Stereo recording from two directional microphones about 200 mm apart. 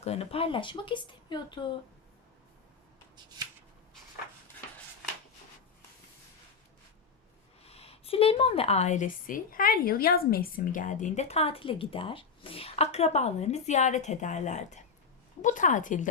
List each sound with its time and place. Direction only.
0.0 s speech: 30° left (ahead or behind)
7.6 s a woman's voice: 30° left (ahead or behind)